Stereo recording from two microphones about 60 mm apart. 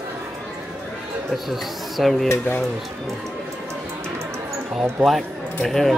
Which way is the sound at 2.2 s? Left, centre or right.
Left.